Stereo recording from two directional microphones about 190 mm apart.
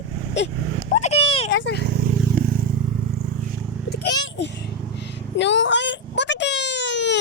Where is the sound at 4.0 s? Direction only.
65° left (ahead or behind).